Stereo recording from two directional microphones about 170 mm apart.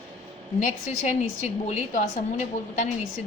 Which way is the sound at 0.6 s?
45° left (ahead or behind).